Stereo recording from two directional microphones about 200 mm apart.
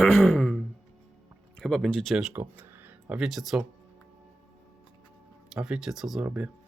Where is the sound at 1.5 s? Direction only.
Centre (ahead or behind).